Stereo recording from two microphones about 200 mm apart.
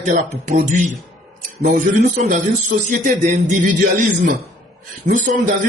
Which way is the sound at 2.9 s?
40° right (ahead or behind).